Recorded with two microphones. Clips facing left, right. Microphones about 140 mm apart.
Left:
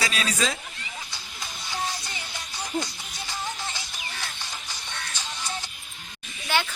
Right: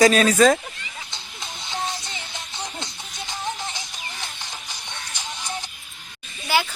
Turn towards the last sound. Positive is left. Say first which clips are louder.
# right 4 dB
turn(degrees=-5)  # may be behind; listen again after turning